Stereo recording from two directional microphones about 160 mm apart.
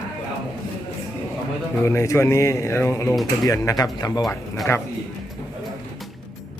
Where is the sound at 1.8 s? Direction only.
20° left (ahead or behind).